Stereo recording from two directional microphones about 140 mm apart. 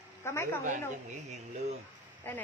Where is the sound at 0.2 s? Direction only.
20° left (ahead or behind).